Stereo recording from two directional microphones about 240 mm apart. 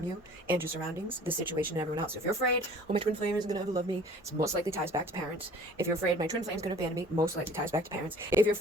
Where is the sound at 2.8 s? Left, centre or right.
Right.